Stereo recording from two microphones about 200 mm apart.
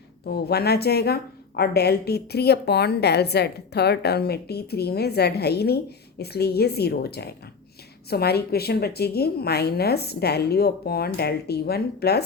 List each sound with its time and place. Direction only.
0.3 s a woman's voice: 55° left (ahead or behind)